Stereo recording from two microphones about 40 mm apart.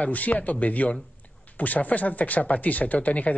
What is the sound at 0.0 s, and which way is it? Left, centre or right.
A man's voice, left.